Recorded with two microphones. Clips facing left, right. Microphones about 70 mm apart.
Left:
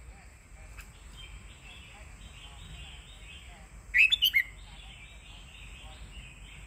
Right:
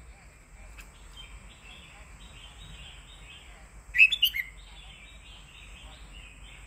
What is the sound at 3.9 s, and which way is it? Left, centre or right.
Bird, left.